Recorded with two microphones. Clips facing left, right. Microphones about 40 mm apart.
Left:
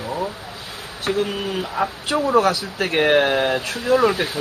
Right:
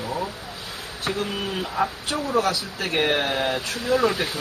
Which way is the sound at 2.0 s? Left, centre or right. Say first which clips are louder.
Left 10 dB; left.